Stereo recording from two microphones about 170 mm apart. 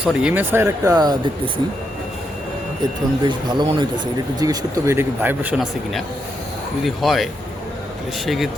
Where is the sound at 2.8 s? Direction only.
25° right (ahead or behind).